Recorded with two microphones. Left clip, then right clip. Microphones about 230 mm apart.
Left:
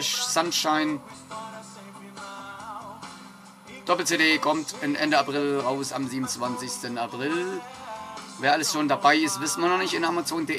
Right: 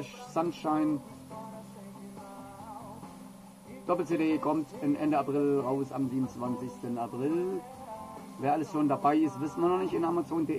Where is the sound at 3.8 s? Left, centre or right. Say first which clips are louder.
Left 7 dB; centre.